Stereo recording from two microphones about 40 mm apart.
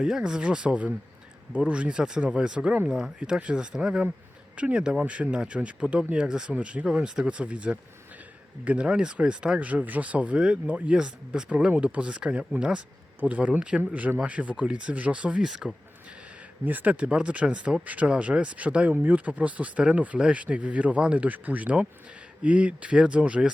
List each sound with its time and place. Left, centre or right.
0.1 s speech: centre
2.6 s speech: right
4.8 s speech: centre
5.0 s speech: right
9.6 s speech: right
11.4 s speech: right
13.2 s speech: right
13.6 s speech: right
14.2 s speech: right
15.4 s speech: centre
16.6 s speech: right
16.9 s speech: right
20.1 s speech: right
20.4 s speech: right